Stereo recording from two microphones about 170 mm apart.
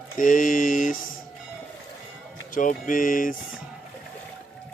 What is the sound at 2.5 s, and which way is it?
Speech, 50° left (ahead or behind).